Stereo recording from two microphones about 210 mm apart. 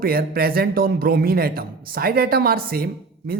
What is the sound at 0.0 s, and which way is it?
A man's voice, 45° right (ahead or behind).